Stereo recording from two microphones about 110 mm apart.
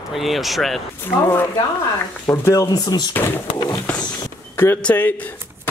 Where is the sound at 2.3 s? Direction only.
30° left (ahead or behind).